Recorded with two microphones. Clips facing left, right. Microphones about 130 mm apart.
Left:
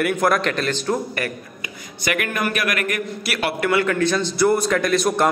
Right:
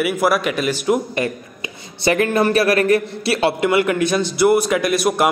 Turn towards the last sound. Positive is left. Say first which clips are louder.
# right 1 dB
turn(degrees=-5)  # may be behind; listen again after turning